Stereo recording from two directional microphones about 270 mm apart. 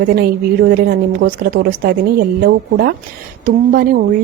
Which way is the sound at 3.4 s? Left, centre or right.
Right.